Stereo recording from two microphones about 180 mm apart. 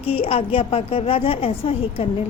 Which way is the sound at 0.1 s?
35° left (ahead or behind).